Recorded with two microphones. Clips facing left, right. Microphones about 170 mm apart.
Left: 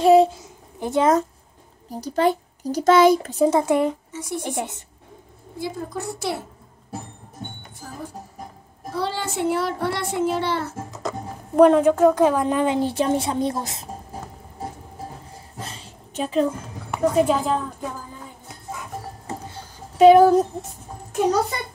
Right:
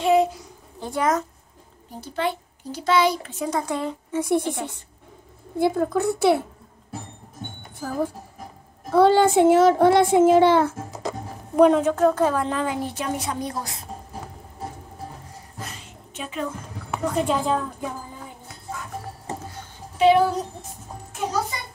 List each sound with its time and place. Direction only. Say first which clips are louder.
0.0 s a sound: left 5 dB; 30° left (ahead or behind)
1.9 s a child's voice: left 6 dB; 40° left (ahead or behind)
3.4 s speech: left 7 dB; 25° left (ahead or behind)
4.1 s a woman's voice: right 9 dB; 55° right (ahead or behind)
4.4 s speech: right 1 dB; 20° left (ahead or behind)
5.6 s a woman's voice: right 8 dB; 60° right (ahead or behind)
7.8 s a woman's voice: right 9 dB; 60° right (ahead or behind)
11.5 s a woman's voice: left 2 dB; centre (ahead or behind)
11.8 s speech: left 3 dB; 10° left (ahead or behind)
15.6 s a sound: left 1 dB; 30° left (ahead or behind)
16.9 s a woman's voice: left 4 dB; 10° left (ahead or behind)
20.0 s speech: left 6 dB; 45° left (ahead or behind)